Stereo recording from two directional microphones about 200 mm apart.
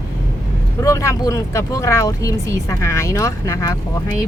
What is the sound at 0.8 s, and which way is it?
Speech, 15° left (ahead or behind).